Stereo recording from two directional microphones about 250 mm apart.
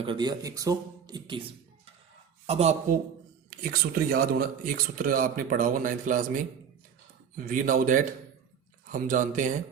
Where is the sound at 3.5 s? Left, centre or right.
Right.